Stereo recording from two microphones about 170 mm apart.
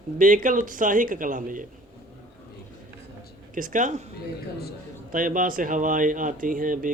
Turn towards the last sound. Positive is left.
turn(degrees=-50)  # may be behind; listen again after turning